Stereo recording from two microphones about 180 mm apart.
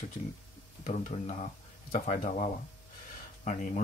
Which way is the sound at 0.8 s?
40° left (ahead or behind).